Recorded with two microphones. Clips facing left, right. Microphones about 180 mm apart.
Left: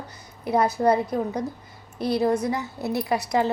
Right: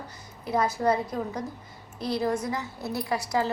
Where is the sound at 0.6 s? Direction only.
65° left (ahead or behind).